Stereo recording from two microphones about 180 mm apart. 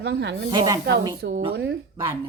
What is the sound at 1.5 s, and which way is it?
Speech, 70° right (ahead or behind).